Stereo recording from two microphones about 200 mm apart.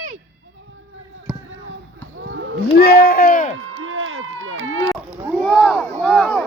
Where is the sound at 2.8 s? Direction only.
50° left (ahead or behind).